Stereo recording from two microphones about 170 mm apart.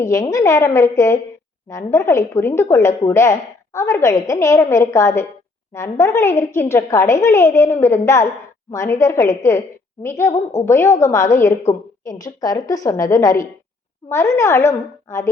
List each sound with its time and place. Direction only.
0.0 s a woman's voice: 20° left (ahead or behind)